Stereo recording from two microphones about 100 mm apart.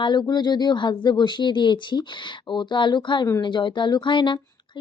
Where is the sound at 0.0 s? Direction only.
45° left (ahead or behind).